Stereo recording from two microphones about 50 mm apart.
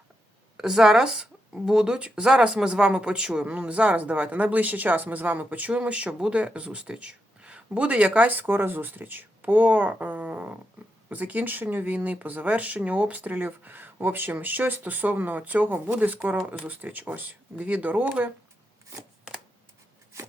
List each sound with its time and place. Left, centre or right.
0.5 s speech: centre; by 18.3 s right